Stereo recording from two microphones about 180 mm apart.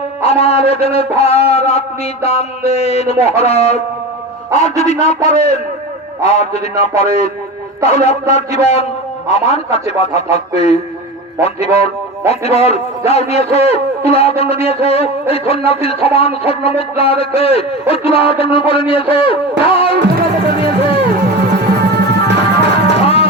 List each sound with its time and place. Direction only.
0.2 s a man's voice: 35° left (ahead or behind)
19.1 s a sound: 30° left (ahead or behind)
19.9 s music: 60° right (ahead or behind)